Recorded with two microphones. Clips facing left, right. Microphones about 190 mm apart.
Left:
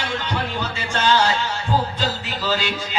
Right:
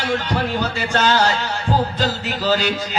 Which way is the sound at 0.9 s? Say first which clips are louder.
Right 1 dB; 40° right (ahead or behind).